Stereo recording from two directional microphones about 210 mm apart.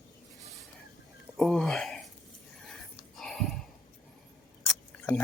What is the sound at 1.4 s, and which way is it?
Speech, 5° left (ahead or behind).